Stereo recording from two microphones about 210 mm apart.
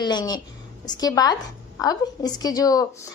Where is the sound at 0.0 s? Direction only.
20° left (ahead or behind).